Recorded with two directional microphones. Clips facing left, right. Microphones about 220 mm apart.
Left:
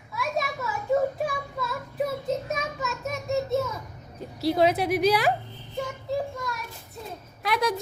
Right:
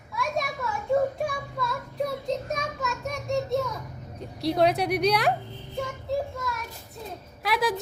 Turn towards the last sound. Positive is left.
turn(degrees=0)  # may be behind; listen again after turning